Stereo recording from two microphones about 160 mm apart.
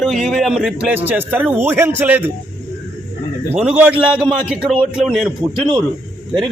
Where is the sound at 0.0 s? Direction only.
Centre (ahead or behind).